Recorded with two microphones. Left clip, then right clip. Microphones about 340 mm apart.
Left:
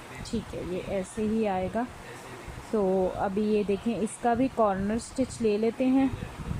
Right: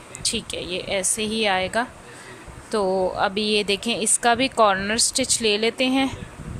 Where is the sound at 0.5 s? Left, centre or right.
Right.